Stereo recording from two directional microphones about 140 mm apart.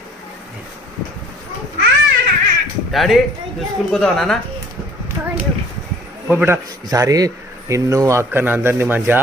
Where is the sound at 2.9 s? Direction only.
Centre (ahead or behind).